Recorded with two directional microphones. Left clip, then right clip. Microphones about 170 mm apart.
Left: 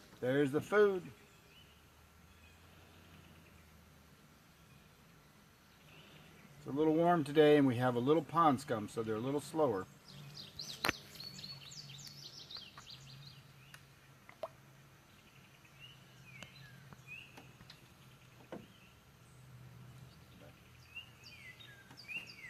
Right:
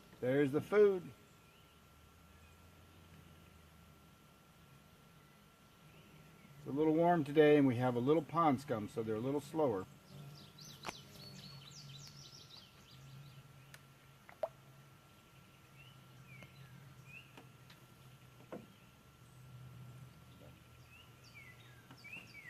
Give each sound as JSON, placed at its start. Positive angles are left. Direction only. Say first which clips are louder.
{"t": 0.2, "sound": "speech", "louder": "left 1 dB", "side_deg": 20}
{"t": 6.7, "sound": "speech", "louder": "left 1 dB", "side_deg": 20}